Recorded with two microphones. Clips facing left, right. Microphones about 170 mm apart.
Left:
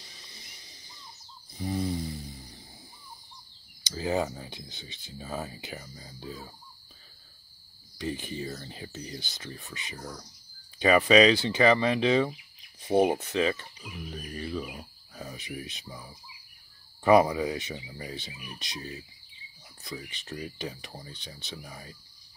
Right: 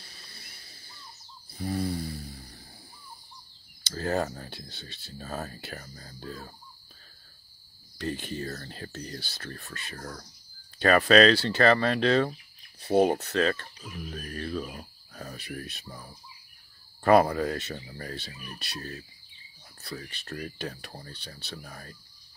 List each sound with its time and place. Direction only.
0.0 s a sound: 20° left (ahead or behind)
3.8 s speech: 15° left (ahead or behind)
8.0 s speech: 15° left (ahead or behind)
15.3 s speech: 15° left (ahead or behind)